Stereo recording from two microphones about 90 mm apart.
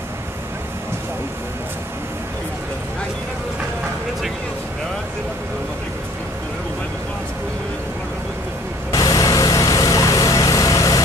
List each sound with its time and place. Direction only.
8.9 s vehicle: 40° left (ahead or behind)